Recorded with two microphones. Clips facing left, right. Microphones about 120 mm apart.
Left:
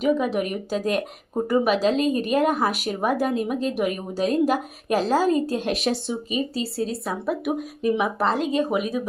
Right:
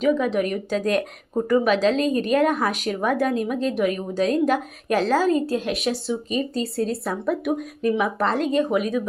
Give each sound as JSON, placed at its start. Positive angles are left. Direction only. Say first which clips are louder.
{"t": 0.0, "sound": "speech", "louder": "right 1 dB", "side_deg": 10}
{"t": 6.3, "sound": "speech", "louder": "right 1 dB", "side_deg": 5}